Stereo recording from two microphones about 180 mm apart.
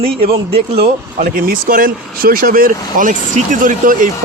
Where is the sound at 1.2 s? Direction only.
50° right (ahead or behind).